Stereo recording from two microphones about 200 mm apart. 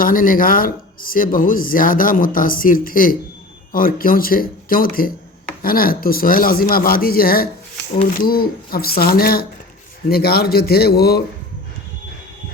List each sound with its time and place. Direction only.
0.0 s speech: 45° left (ahead or behind)